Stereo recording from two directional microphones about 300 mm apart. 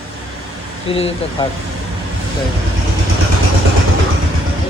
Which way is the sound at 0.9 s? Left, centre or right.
Centre.